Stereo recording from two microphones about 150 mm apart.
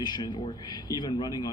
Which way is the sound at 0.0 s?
30° left (ahead or behind).